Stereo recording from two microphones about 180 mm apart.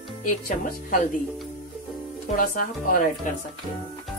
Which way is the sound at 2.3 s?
50° left (ahead or behind).